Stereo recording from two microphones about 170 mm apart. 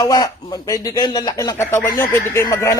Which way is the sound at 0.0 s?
20° left (ahead or behind).